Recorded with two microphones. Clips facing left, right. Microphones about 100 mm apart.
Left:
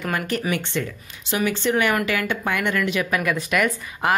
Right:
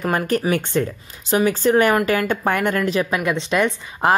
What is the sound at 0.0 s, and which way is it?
A woman's voice, 40° right (ahead or behind).